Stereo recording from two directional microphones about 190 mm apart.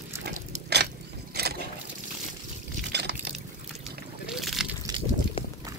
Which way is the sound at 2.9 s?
60° right (ahead or behind).